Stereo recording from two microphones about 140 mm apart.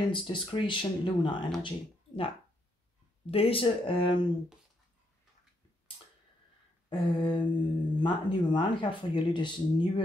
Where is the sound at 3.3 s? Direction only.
45° left (ahead or behind).